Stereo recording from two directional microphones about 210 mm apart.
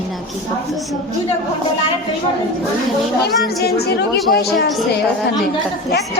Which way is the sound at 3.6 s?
50° left (ahead or behind).